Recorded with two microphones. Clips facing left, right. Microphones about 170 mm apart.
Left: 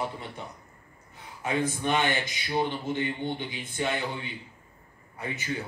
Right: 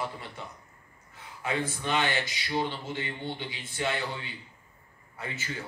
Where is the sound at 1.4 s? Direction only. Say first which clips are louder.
Left 3 dB; 15° left (ahead or behind).